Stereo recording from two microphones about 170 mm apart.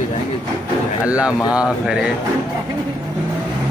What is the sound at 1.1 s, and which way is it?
Speech, 5° right (ahead or behind).